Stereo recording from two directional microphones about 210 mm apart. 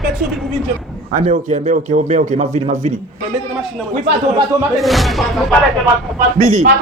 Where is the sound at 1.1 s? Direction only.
35° right (ahead or behind).